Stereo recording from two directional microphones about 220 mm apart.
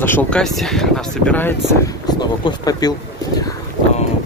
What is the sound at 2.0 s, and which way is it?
Speech, 20° left (ahead or behind).